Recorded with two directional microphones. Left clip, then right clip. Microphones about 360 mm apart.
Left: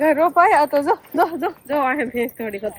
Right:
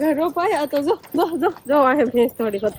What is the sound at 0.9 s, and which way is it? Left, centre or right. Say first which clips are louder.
Speech: left 2 dB; centre.